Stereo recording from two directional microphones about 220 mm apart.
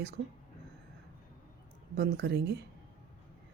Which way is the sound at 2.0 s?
50° right (ahead or behind).